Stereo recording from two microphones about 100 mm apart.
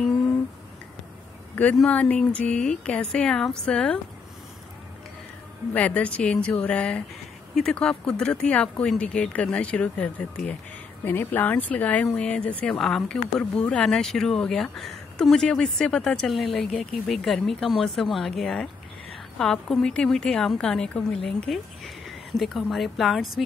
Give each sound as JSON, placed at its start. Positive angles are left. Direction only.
{"t": 1.5, "sound": "a sound", "side_deg": 15}
{"t": 1.9, "sound": "speech", "side_deg": 15}
{"t": 5.7, "sound": "speech", "side_deg": 15}
{"t": 11.1, "sound": "speech", "side_deg": 20}